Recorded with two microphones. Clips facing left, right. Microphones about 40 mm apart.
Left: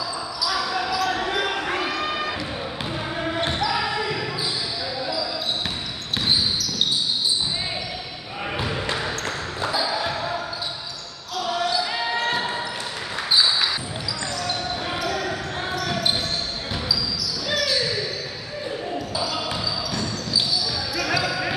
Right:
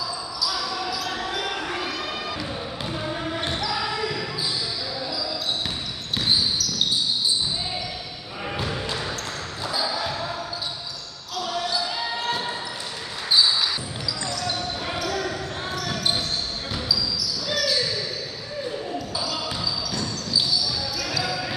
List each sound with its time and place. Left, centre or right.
0.5 s basketball bounce: left
2.0 s a sound: left
2.9 s basketball bounce: centre
8.5 s basketball bounce: centre
11.3 s basketball bounce: centre
14.4 s basketball bounce: centre
18.9 s basketball bounce: centre
21.2 s basketball bounce: left